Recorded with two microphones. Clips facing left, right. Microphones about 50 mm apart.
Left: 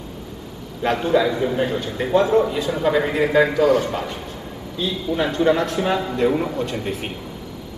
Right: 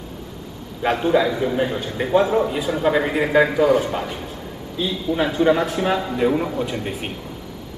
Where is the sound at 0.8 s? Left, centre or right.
Centre.